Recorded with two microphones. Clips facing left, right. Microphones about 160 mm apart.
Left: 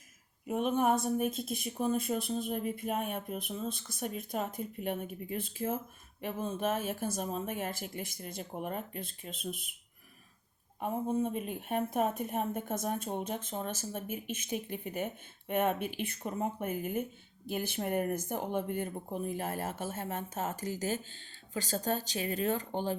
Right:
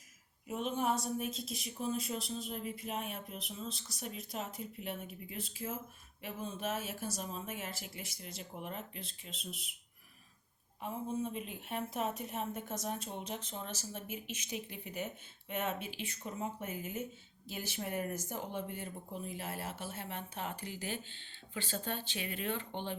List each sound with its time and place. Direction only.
0.4 s a woman's voice: 55° left (ahead or behind)
10.8 s a woman's voice: 50° left (ahead or behind)